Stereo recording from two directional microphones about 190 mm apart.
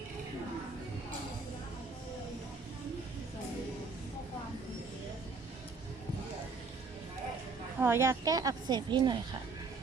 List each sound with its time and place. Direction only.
7.8 s speech: 15° right (ahead or behind)